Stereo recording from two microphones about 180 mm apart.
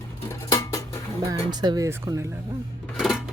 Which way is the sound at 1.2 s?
20° right (ahead or behind).